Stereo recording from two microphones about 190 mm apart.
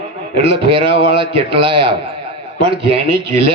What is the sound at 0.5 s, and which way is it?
A man's voice, 30° right (ahead or behind).